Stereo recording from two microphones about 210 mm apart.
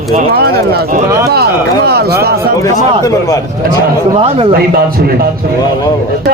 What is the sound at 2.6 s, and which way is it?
Speech, 15° left (ahead or behind).